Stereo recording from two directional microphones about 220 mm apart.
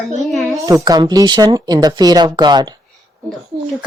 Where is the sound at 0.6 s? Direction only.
15° right (ahead or behind).